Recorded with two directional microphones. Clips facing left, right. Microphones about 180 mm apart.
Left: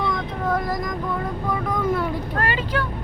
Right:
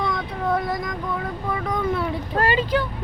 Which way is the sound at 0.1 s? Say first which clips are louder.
Even; centre (ahead or behind).